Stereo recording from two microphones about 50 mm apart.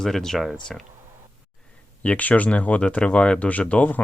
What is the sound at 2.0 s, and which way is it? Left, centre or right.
Speech, left.